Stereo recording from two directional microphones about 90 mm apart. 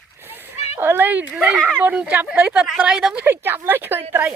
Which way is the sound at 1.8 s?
15° right (ahead or behind).